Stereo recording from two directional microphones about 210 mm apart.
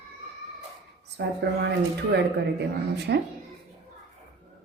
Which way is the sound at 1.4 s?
50° right (ahead or behind).